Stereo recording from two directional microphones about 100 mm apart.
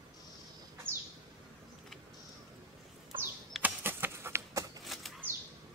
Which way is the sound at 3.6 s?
20° right (ahead or behind).